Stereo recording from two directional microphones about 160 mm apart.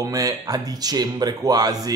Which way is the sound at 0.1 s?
20° right (ahead or behind).